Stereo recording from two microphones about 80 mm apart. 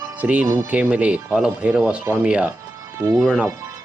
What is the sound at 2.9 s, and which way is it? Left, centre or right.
Speech, right.